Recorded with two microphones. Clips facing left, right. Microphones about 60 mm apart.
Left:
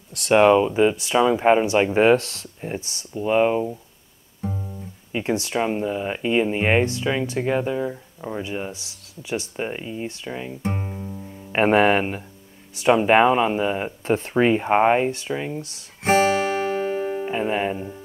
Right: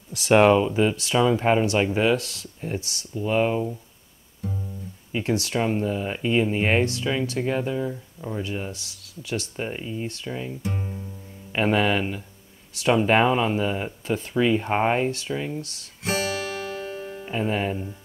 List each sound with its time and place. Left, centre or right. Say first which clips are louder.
0.3 s speech: left 2 dB; centre; by 2.0 s left
2.0 s speech: left 6 dB; left; by 3.7 s centre
4.4 s music: left 3 dB; left
5.1 s speech: left 1 dB; left
10.6 s guitar: left 3 dB; left
11.5 s speech: left 5 dB; left
12.7 s speech: left 3 dB; left
14.0 s speech: left 4 dB; left
14.6 s speech: left 5 dB; centre
16.0 s music: left 9 dB; left
17.3 s speech: right 1 dB; centre